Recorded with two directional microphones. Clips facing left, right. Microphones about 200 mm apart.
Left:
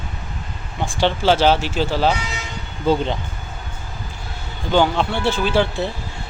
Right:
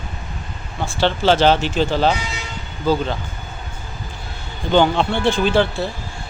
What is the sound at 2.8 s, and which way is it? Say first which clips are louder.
Speech: left 1 dB; 25° left (ahead or behind).